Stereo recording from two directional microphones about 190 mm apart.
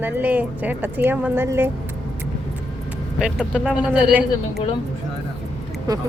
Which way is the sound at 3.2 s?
5° right (ahead or behind).